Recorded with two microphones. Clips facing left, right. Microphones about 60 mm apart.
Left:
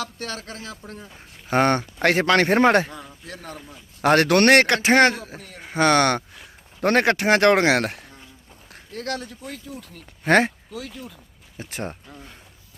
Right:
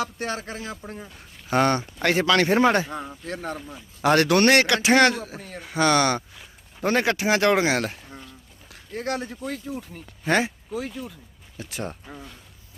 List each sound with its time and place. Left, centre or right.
0.0 s speech: right
1.5 s a man's voice: left
2.9 s speech: right
4.0 s a man's voice: left
8.9 s speech: right
9.7 s speech: right
10.2 s speech: left
10.7 s speech: right
11.5 s speech: left